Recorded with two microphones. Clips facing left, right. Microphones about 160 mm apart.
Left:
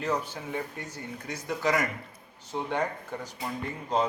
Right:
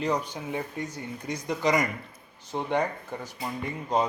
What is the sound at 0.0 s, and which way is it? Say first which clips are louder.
Speech: right 2 dB; 15° right (ahead or behind).